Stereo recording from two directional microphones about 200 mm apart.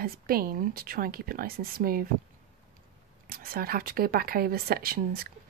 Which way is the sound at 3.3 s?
50° right (ahead or behind).